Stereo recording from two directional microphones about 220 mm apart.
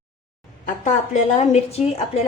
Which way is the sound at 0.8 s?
35° left (ahead or behind).